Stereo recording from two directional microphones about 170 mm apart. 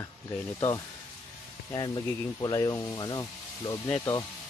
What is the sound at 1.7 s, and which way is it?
Speech, 25° left (ahead or behind).